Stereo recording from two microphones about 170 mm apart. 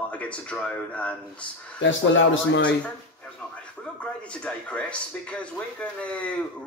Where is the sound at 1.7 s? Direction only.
90° left.